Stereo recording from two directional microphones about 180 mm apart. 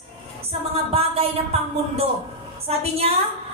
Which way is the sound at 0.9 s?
35° right (ahead or behind).